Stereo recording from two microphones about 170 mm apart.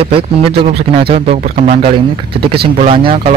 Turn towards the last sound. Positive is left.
turn(degrees=-35)  # may be behind; listen again after turning